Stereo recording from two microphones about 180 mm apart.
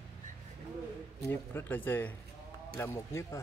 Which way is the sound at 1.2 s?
15° left (ahead or behind).